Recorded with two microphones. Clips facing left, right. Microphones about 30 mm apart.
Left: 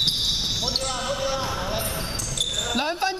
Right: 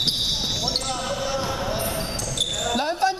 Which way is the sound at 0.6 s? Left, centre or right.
Centre.